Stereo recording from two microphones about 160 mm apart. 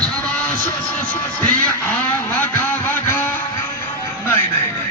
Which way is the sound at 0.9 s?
10° left (ahead or behind).